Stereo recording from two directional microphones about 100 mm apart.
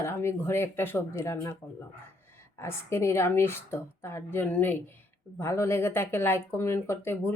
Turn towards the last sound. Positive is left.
turn(degrees=20)  # may be behind; listen again after turning